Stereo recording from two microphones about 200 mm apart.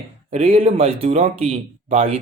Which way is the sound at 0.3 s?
35° right (ahead or behind).